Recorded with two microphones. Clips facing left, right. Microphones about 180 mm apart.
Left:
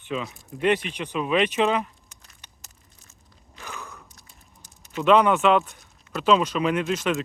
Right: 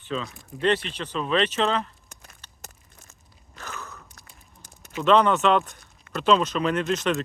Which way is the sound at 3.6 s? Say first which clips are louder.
Even; 15° left (ahead or behind).